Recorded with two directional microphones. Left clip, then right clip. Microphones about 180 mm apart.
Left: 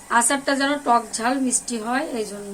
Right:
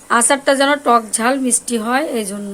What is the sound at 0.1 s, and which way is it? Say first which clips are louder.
A woman's voice: right 6 dB; 50° right (ahead or behind).